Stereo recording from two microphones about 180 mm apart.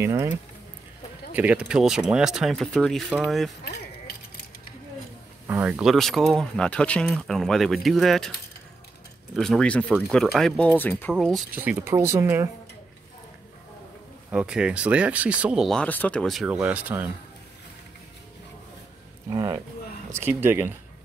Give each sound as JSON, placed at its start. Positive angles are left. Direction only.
{"t": 0.0, "sound": "speech", "side_deg": -15}
{"t": 5.5, "sound": "speech", "side_deg": -10}
{"t": 9.3, "sound": "speech", "side_deg": 0}
{"t": 11.1, "sound": "speech", "side_deg": 0}
{"t": 11.5, "sound": "speech", "side_deg": -10}
{"t": 14.3, "sound": "speech", "side_deg": -5}
{"t": 19.3, "sound": "speech", "side_deg": -20}